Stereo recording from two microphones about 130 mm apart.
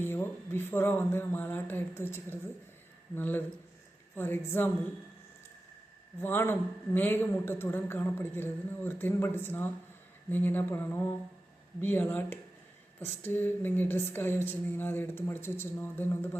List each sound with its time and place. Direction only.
0.0 s a man's voice: 15° left (ahead or behind)
6.1 s a man's voice: 15° left (ahead or behind)